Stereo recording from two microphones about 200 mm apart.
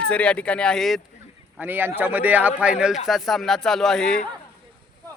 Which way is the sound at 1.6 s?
10° right (ahead or behind).